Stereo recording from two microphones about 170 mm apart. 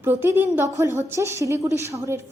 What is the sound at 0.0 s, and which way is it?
A woman's voice, 15° right (ahead or behind).